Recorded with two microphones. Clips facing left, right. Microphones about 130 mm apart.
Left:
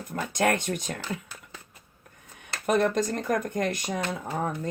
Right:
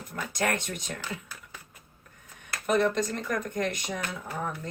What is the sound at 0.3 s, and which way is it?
Speech, 50° left (ahead or behind).